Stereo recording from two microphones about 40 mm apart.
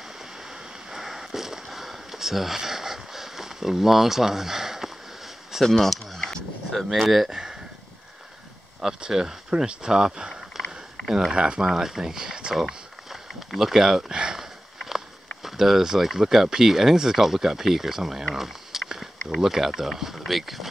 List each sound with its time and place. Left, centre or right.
0.8 s a sound: centre
5.8 s speech: centre
6.9 s speech: centre
8.8 s speech: centre
11.3 s speech: right
11.6 s speech: centre
12.5 s a sound: centre
13.6 s speech: centre
18.3 s a sound: centre
19.4 s speech: centre